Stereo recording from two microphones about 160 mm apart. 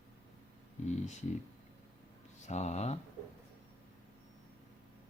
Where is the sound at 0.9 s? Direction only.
45° left (ahead or behind).